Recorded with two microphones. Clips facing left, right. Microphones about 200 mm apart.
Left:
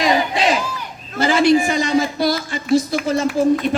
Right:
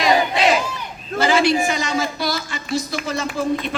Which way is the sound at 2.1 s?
50° left (ahead or behind).